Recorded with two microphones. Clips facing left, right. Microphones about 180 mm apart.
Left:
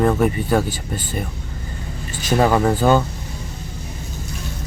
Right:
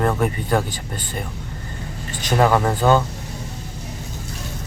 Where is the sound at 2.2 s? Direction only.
5° left (ahead or behind).